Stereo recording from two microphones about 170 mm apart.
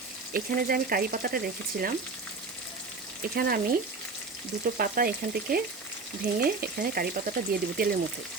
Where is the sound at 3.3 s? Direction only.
60° right (ahead or behind).